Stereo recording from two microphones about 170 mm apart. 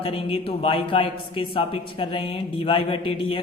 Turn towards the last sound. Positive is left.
turn(degrees=30)  # may be behind; listen again after turning